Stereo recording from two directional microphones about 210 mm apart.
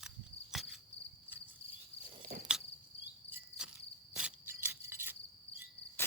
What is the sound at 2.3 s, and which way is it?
Cricket, 45° right (ahead or behind).